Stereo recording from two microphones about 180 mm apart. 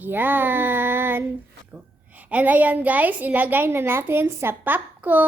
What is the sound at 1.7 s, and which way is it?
A woman's voice, 10° right (ahead or behind).